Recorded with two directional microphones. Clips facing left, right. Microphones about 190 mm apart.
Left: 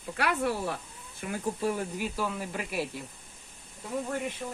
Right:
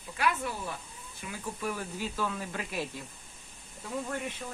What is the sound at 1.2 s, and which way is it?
Speech, 50° left (ahead or behind).